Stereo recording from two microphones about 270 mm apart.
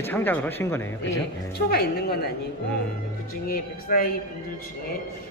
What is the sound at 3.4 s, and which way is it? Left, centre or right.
Speech, left.